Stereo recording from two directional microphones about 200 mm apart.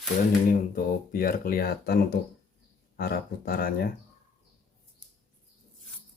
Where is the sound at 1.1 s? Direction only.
45° left (ahead or behind).